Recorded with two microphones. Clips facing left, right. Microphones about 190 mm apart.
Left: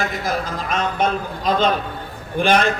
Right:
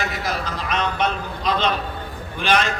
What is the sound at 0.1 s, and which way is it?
A man's voice, 50° left (ahead or behind).